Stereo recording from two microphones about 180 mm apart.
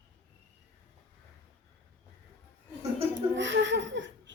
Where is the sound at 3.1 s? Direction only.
90° right.